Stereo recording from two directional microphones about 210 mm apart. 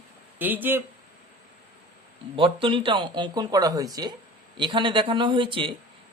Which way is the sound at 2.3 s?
25° right (ahead or behind).